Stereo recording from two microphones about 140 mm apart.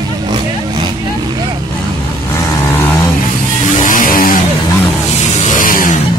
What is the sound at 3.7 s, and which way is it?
Vehicle, 70° left (ahead or behind).